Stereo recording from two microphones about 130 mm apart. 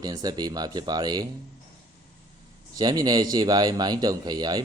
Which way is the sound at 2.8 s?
30° right (ahead or behind).